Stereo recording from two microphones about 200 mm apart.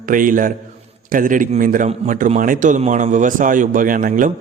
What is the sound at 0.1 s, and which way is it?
A man's voice, 45° right (ahead or behind).